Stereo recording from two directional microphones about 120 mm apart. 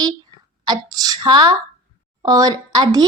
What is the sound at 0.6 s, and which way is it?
A child's voice, 35° right (ahead or behind).